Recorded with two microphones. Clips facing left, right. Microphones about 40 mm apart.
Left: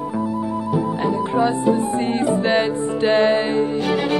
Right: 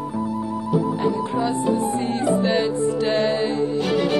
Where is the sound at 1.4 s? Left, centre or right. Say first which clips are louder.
Left 2 dB; left.